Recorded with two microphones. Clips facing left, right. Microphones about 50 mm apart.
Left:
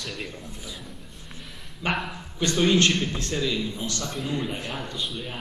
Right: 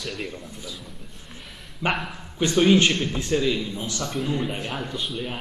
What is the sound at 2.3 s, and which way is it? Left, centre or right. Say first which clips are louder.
A man's voice: right 3 dB; centre.